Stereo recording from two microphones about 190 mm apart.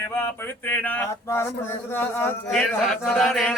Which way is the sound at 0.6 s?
10° left (ahead or behind).